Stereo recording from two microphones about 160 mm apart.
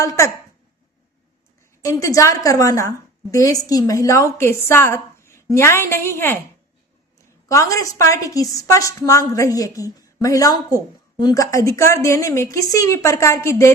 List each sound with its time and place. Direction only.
0.0 s a woman's voice: 20° left (ahead or behind)
1.8 s a woman's voice: 20° left (ahead or behind)
7.4 s a woman's voice: 20° left (ahead or behind)